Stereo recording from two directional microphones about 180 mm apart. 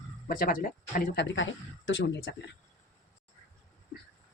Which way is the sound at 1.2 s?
90° left.